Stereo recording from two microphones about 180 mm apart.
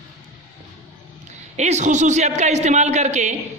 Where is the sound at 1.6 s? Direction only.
40° right (ahead or behind).